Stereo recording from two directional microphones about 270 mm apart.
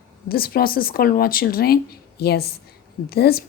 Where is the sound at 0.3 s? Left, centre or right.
Left.